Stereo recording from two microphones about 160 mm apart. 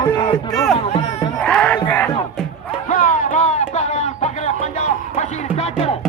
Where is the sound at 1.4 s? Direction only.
5° left (ahead or behind).